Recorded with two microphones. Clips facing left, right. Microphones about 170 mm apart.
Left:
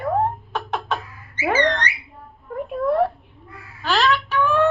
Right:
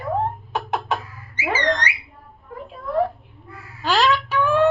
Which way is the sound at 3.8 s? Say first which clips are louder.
Right 1 dB; 15° right (ahead or behind).